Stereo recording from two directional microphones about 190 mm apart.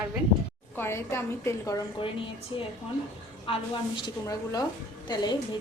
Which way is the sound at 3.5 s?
25° left (ahead or behind).